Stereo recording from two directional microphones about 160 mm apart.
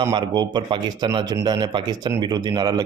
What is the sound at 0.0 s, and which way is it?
A man's voice, 25° right (ahead or behind).